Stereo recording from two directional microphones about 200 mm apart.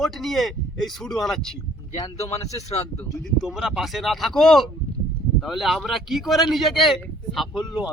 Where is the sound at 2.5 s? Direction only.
15° left (ahead or behind).